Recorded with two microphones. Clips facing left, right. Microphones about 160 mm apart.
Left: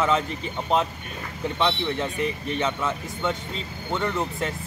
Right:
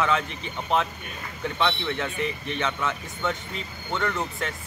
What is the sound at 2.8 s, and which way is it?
Speech, 10° left (ahead or behind).